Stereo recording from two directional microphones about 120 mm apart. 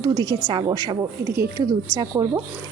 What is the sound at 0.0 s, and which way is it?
Speech, 35° right (ahead or behind).